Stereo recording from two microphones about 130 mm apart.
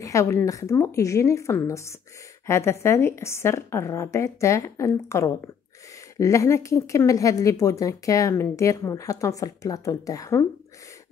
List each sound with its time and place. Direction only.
0.0 s speech: 25° left (ahead or behind)